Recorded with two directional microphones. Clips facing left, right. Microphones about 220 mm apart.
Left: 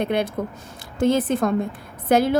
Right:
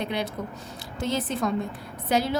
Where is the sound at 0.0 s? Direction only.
55° left (ahead or behind).